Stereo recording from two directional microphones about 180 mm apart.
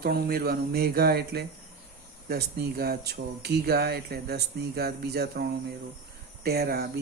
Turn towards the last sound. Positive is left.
turn(degrees=-60)  # may be behind; listen again after turning